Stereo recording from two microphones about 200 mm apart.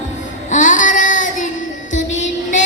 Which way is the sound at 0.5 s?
40° left (ahead or behind).